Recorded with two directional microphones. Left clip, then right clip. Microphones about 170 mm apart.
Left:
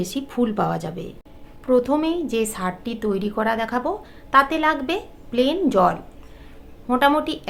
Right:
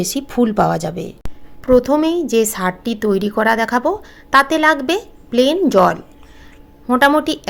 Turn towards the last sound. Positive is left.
turn(degrees=-50)  # may be behind; listen again after turning